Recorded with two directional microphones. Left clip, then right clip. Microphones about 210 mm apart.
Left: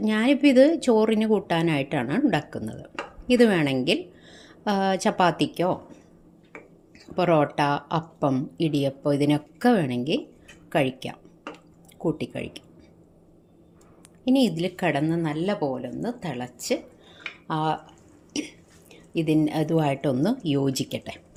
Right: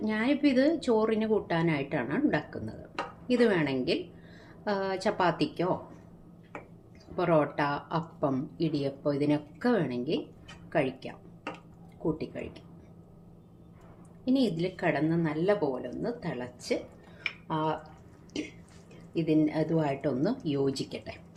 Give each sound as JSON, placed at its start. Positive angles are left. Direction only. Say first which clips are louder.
{"t": 0.0, "sound": "a woman's voice", "louder": "left 7 dB", "side_deg": 40}
{"t": 7.2, "sound": "a woman's voice", "louder": "left 5 dB", "side_deg": 40}
{"t": 14.3, "sound": "a woman's voice", "louder": "left 6 dB", "side_deg": 40}
{"t": 19.1, "sound": "a woman's voice", "louder": "left 4 dB", "side_deg": 45}